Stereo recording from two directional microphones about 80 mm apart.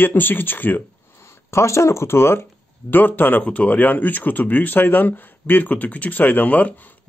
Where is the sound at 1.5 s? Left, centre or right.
Left.